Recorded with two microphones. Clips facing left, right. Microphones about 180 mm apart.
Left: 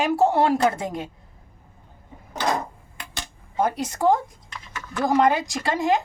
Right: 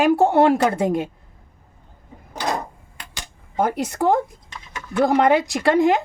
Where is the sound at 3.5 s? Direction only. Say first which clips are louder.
Right 2 dB; 55° right (ahead or behind).